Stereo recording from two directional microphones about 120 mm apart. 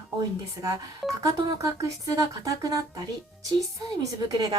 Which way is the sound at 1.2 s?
30° right (ahead or behind).